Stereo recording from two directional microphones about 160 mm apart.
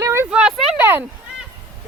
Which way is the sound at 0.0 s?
15° right (ahead or behind).